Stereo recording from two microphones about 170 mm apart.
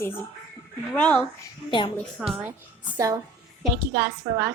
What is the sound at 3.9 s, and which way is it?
Speech, 90° right.